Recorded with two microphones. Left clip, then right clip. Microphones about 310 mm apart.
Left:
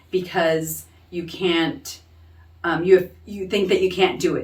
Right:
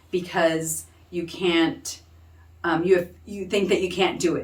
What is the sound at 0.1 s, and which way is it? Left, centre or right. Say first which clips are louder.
Speech: left 2 dB; centre.